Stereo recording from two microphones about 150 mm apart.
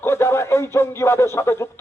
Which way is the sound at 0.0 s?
15° left (ahead or behind).